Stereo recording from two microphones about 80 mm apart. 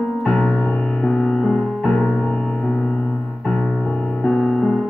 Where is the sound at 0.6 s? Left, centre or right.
Centre.